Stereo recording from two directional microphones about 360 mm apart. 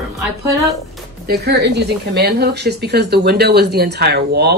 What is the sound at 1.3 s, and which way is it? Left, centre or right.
Speech, right.